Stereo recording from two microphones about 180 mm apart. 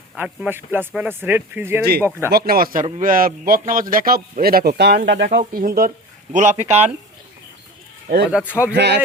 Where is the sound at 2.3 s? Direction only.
55° right (ahead or behind).